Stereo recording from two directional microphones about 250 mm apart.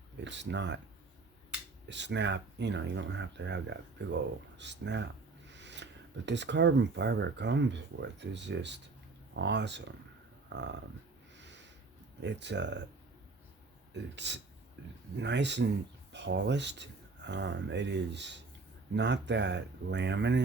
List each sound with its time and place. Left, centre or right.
0.3 s speech: right
1.9 s speech: right
11.3 s a sound: right
12.2 s speech: right
13.9 s speech: right